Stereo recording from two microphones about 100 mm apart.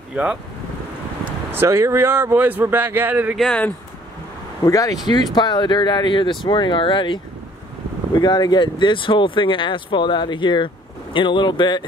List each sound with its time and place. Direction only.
0.1 s speech: 10° right (ahead or behind)
1.5 s speech: 25° right (ahead or behind)
3.3 s speech: 5° left (ahead or behind)
4.6 s speech: 35° left (ahead or behind)
5.0 s speech: 45° left (ahead or behind)
8.2 s speech: 45° left (ahead or behind)